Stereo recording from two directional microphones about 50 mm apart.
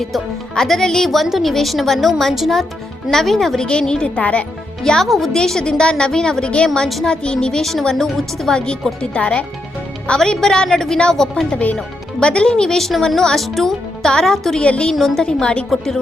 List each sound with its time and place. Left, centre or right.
0.0 s a woman's voice: centre
3.7 s speech: centre
4.8 s speech: centre
5.0 s a woman's voice: centre
5.3 s speech: centre
7.6 s a woman's voice: centre
11.5 s speech: left
12.2 s speech: centre
14.6 s speech: left
14.9 s speech: centre